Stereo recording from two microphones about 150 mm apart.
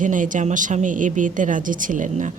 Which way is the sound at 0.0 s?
60° right (ahead or behind).